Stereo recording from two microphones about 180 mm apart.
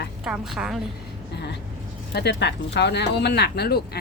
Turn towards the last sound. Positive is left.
turn(degrees=65)  # may be behind; listen again after turning